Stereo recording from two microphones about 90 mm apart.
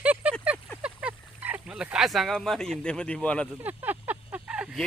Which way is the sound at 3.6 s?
20° right (ahead or behind).